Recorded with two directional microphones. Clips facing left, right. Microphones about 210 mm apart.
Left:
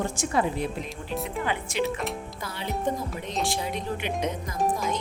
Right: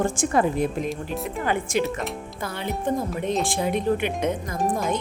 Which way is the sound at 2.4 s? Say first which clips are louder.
Right 2 dB; 55° right (ahead or behind).